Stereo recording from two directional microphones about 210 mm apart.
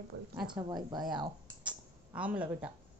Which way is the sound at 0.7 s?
20° right (ahead or behind).